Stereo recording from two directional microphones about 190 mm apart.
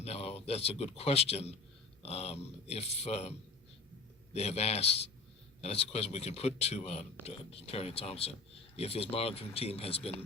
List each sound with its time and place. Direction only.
0.0 s a man's voice: 30° left (ahead or behind)
4.4 s speech: 35° left (ahead or behind)